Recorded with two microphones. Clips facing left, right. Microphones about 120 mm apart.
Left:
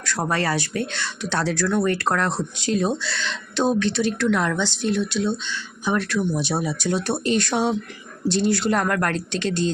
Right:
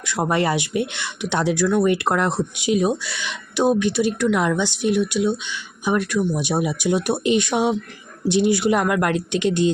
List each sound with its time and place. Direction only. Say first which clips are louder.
0.0 s speech: right 3 dB; 15° right (ahead or behind)